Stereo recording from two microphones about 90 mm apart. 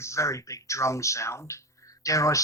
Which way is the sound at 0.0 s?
35° left (ahead or behind).